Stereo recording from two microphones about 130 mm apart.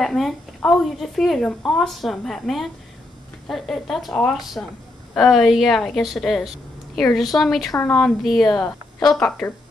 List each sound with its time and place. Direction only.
0.0 s a woman's voice: 5° left (ahead or behind)
8.5 s speech: 30° left (ahead or behind)
9.1 s a woman's voice: centre (ahead or behind)